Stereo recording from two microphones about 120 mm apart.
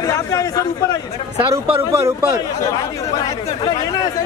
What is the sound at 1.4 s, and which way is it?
Speech, 45° right (ahead or behind).